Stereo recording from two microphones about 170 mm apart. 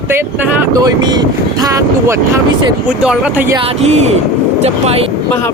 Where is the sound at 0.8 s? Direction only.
25° right (ahead or behind).